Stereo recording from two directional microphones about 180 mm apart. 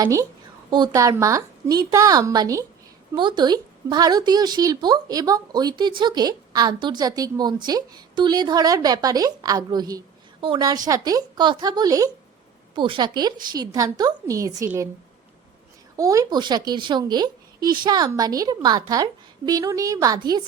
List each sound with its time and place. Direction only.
0.0 s a woman's voice: 20° right (ahead or behind)
16.0 s speech: 20° right (ahead or behind)